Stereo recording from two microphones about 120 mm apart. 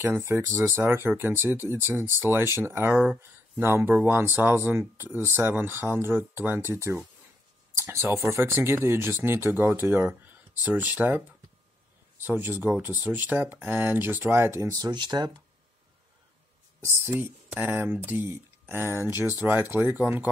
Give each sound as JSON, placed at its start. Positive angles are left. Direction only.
{"t": 0.0, "sound": "speech", "side_deg": -20}
{"t": 16.8, "sound": "speech", "side_deg": -20}